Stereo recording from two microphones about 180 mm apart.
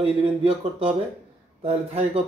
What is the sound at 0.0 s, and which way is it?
Speech, 30° right (ahead or behind).